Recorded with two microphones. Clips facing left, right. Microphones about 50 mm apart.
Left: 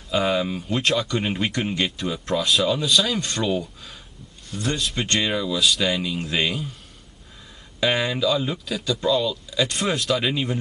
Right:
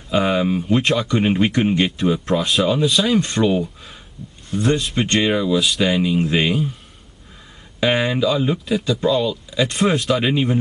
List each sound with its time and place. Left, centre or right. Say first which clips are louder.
0.1 s speech: right 4 dB; centre
0.7 s speech: right 2 dB; centre
7.8 s speech: right 4 dB; centre